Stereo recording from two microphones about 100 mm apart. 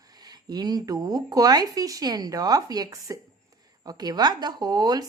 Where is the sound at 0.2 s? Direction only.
45° right (ahead or behind).